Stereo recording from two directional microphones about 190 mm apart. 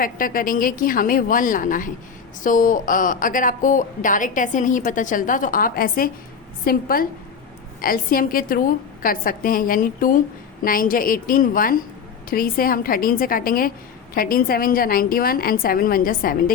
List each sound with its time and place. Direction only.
0.0 s a woman's voice: 45° left (ahead or behind)